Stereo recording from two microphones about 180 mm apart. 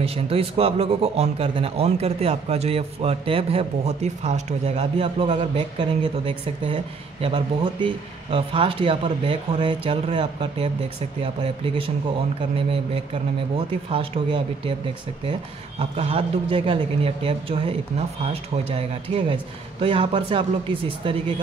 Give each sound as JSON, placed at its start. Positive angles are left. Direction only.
{"t": 0.0, "sound": "a man's voice", "side_deg": -30}
{"t": 15.8, "sound": "a man's voice", "side_deg": -35}